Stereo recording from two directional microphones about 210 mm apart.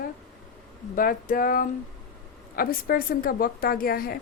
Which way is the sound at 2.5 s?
45° left (ahead or behind).